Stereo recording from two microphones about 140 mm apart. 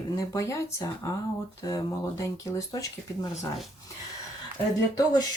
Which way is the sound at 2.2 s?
20° left (ahead or behind).